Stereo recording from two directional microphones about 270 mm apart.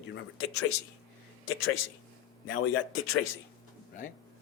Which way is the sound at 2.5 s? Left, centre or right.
Left.